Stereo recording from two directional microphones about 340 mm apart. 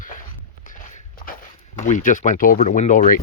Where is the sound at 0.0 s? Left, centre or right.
Left.